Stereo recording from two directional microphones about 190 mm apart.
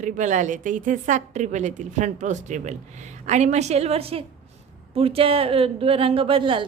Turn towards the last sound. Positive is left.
turn(degrees=-25)  # may be behind; listen again after turning